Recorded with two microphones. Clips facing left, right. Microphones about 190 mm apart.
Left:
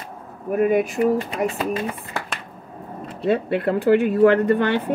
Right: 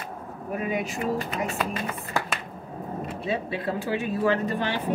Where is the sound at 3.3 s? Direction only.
60° left (ahead or behind).